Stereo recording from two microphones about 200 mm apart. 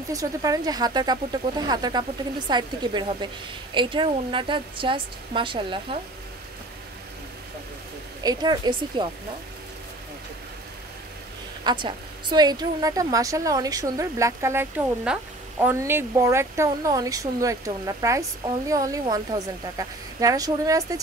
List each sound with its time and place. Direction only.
0.1 s speech: 15° right (ahead or behind)
8.2 s speech: 20° right (ahead or behind)
11.6 s a woman's voice: 20° right (ahead or behind)